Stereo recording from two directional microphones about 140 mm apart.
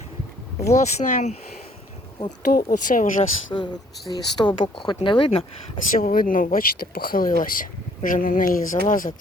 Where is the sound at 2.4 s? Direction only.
80° left.